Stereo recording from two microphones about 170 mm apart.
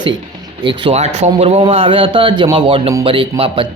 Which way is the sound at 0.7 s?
30° right (ahead or behind).